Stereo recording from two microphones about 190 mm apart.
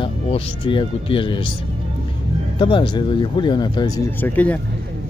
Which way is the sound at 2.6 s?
25° left (ahead or behind).